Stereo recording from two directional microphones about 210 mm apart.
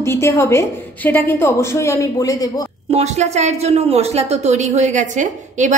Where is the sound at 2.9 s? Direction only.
30° right (ahead or behind).